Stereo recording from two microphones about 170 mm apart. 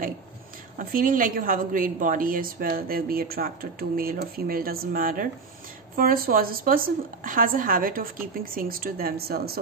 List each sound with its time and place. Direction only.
0.7 s a woman's voice: 55° right (ahead or behind)